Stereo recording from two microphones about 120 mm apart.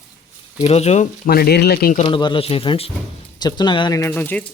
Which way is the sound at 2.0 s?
40° left (ahead or behind).